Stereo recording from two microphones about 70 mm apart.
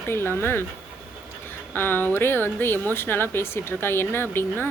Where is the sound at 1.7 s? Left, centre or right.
Left.